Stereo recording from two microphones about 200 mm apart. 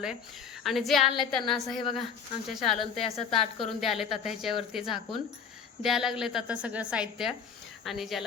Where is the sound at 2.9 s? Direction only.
30° left (ahead or behind).